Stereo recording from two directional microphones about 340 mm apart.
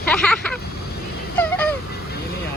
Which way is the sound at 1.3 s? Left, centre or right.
Centre.